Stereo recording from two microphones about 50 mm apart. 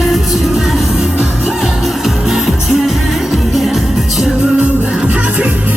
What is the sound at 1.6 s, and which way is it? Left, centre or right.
Music, centre.